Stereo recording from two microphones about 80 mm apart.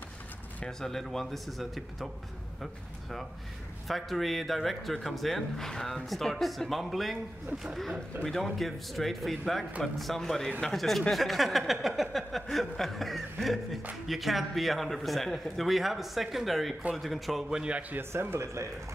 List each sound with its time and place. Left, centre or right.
0.7 s a man's voice: centre
18.1 s speech: right